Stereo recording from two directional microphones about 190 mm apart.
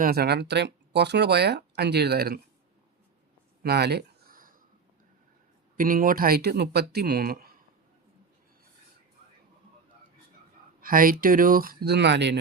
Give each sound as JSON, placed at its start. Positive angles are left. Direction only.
{"t": 0.0, "sound": "speech", "side_deg": -55}
{"t": 3.6, "sound": "a sound", "side_deg": -55}
{"t": 5.7, "sound": "speech", "side_deg": -45}
{"t": 10.8, "sound": "speech", "side_deg": -50}